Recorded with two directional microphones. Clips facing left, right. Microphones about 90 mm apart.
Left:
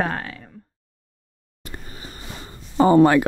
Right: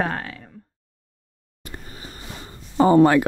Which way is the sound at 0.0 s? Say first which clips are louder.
Even; 20° left (ahead or behind).